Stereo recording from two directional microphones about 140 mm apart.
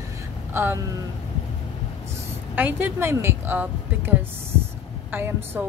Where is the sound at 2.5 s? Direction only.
15° right (ahead or behind).